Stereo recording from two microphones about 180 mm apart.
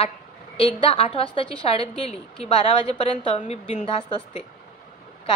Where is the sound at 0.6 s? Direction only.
30° left (ahead or behind).